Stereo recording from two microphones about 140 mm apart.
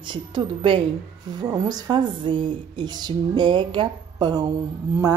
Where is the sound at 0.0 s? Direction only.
35° right (ahead or behind).